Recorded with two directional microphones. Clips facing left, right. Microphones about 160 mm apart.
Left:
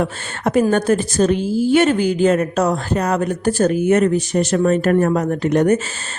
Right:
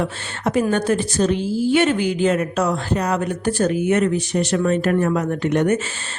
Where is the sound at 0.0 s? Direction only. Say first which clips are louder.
Left 2 dB; 50° left (ahead or behind).